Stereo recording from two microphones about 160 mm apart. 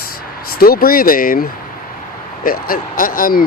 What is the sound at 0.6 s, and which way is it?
Speech, 65° left (ahead or behind).